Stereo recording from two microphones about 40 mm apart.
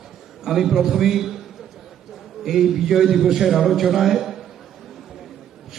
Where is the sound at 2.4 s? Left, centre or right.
Centre.